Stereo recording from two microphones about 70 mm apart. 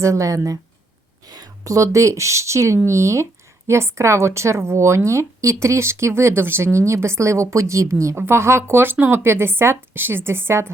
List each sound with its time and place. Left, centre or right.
0.0 s speech: right